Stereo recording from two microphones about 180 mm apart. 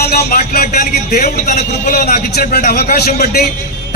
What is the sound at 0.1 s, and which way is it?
A man's voice, 55° left (ahead or behind).